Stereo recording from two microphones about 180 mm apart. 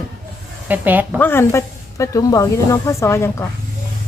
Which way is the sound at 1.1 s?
10° left (ahead or behind).